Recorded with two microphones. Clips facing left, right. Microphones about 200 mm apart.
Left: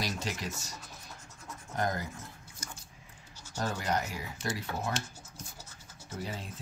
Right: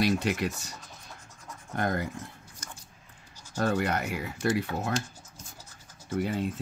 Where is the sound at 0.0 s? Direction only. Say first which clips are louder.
Right 10 dB; 60° right (ahead or behind).